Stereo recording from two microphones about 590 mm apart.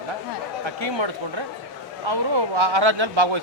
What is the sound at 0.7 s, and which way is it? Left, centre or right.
Speech, right.